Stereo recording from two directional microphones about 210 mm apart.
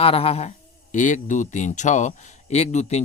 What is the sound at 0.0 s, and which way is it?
Speech, 30° left (ahead or behind).